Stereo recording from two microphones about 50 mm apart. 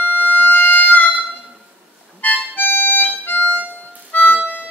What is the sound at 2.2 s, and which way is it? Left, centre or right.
Harmonica, left.